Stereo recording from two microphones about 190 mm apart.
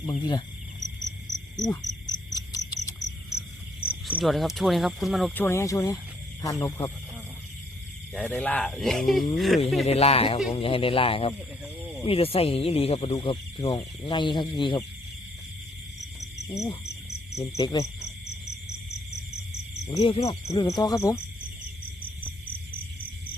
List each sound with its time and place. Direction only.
0.0 s speech: 20° left (ahead or behind)
1.5 s speech: 20° left (ahead or behind)
2.0 s cricket: 20° left (ahead or behind)
3.8 s speech: 5° right (ahead or behind); by 6.7 s 20° left (ahead or behind)
8.1 s speech: 5° left (ahead or behind)
9.8 s speech: 35° left (ahead or behind)
16.2 s cricket: 20° left (ahead or behind)
17.3 s speech: 20° left (ahead or behind)
20.1 s speech: 30° left (ahead or behind)
20.4 s speech: 15° left (ahead or behind)